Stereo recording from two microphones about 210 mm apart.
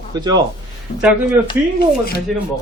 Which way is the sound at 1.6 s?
10° right (ahead or behind).